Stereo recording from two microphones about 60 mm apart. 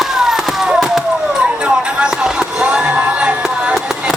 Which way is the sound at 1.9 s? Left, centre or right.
Centre.